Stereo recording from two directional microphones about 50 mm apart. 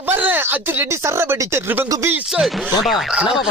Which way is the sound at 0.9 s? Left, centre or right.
Right.